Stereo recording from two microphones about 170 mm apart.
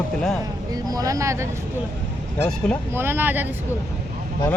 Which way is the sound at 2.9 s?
15° right (ahead or behind).